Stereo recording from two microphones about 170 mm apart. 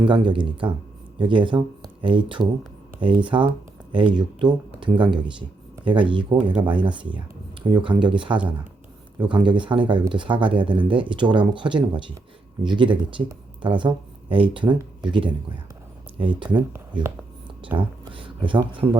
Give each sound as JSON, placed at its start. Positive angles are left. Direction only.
{"t": 0.1, "sound": "speech", "side_deg": -30}
{"t": 16.6, "sound": "speech", "side_deg": -20}
{"t": 17.7, "sound": "speech", "side_deg": -30}